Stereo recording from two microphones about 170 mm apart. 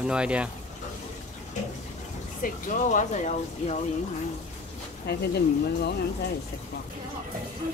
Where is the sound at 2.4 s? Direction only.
45° left (ahead or behind).